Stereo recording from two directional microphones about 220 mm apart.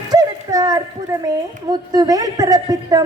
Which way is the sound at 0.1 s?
15° right (ahead or behind).